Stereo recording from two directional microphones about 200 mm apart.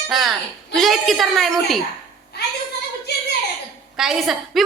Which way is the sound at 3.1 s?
55° left (ahead or behind).